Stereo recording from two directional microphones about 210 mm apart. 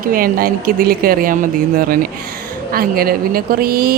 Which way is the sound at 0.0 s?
40° right (ahead or behind).